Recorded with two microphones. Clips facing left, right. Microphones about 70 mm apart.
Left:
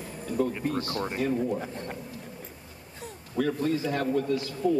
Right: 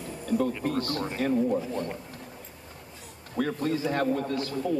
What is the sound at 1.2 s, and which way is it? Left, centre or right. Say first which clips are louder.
Speech: right 1 dB; right.